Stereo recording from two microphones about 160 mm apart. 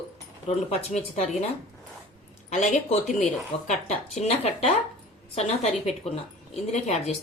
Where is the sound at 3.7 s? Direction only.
45° left (ahead or behind).